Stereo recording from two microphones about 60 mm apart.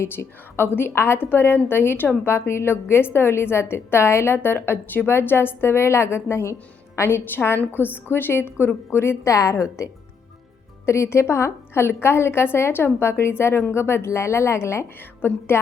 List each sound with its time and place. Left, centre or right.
0.0 s a woman's voice: left
7.3 s a woman's voice: left
10.8 s a woman's voice: left